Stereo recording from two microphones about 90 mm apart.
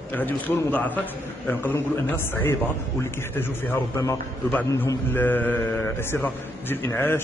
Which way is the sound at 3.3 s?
25° left (ahead or behind).